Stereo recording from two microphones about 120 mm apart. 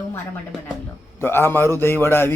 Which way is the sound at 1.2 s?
20° left (ahead or behind).